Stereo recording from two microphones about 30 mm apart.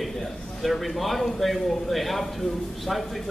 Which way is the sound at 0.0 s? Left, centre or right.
Centre.